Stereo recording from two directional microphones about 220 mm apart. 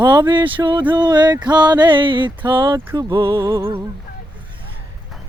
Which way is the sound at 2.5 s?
20° right (ahead or behind).